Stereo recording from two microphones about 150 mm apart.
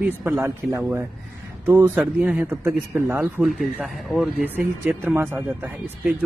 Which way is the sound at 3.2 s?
Centre (ahead or behind).